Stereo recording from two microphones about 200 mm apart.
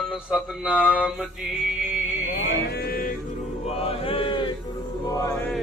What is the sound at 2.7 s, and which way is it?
Music, 50° left (ahead or behind).